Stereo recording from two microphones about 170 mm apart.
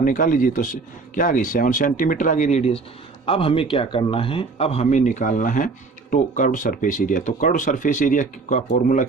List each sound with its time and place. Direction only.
0.0 s a man's voice: 50° left (ahead or behind)